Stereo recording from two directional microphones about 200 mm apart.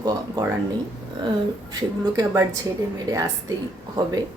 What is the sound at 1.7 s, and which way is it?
Speech, 20° right (ahead or behind).